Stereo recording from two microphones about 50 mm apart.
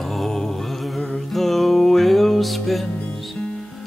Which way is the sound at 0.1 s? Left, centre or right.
Centre.